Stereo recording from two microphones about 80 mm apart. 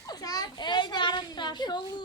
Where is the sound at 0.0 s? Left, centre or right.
Left.